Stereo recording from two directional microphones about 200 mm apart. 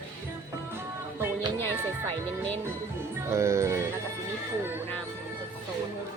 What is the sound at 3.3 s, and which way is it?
Music, 15° right (ahead or behind).